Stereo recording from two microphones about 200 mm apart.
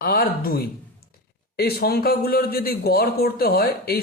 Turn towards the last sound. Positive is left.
turn(degrees=50)  # may be behind; listen again after turning